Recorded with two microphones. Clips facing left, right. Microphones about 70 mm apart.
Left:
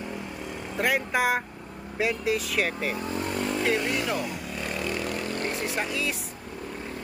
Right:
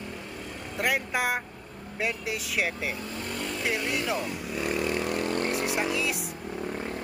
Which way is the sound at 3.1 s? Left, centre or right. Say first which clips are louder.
Left 5 dB; left.